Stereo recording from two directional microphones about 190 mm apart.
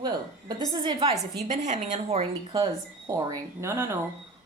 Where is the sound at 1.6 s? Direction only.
40° right (ahead or behind).